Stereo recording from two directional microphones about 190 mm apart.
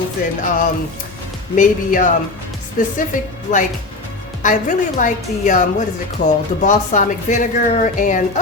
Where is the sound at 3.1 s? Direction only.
45° left (ahead or behind).